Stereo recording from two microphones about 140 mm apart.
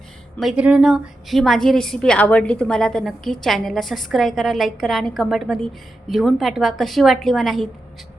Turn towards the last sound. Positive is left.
turn(degrees=0)  # may be behind; listen again after turning